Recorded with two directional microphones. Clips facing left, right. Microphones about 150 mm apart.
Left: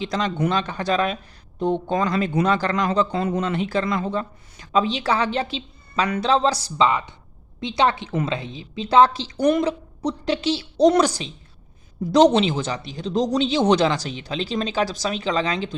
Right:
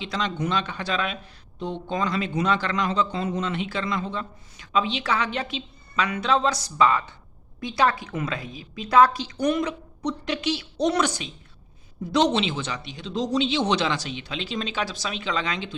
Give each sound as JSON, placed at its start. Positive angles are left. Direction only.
{"t": 0.0, "sound": "speech", "side_deg": 45}
{"t": 6.8, "sound": "speech", "side_deg": 20}